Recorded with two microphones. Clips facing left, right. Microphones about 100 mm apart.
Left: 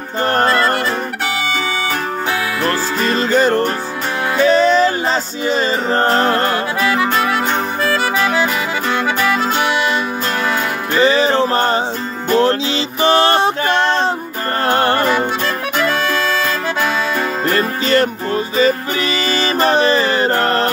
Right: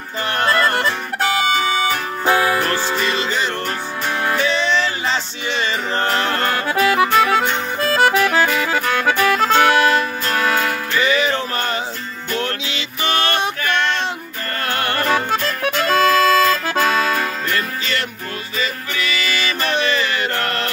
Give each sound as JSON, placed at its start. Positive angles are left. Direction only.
{"t": 0.2, "sound": "music", "side_deg": 40}
{"t": 1.2, "sound": "music", "side_deg": -40}
{"t": 2.6, "sound": "music", "side_deg": 40}
{"t": 9.0, "sound": "music", "side_deg": -50}
{"t": 11.0, "sound": "a sound", "side_deg": 35}
{"t": 12.3, "sound": "music", "side_deg": 30}
{"t": 13.0, "sound": "a sound", "side_deg": 30}
{"t": 14.7, "sound": "music", "side_deg": 30}
{"t": 17.5, "sound": "music", "side_deg": 35}